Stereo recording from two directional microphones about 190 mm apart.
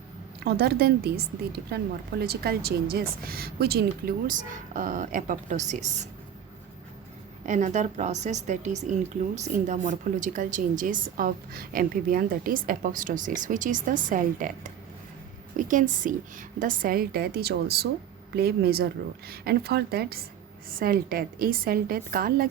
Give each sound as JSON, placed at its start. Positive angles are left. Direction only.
{"t": 0.3, "sound": "a woman's voice", "side_deg": -60}
{"t": 7.4, "sound": "a woman's voice", "side_deg": -40}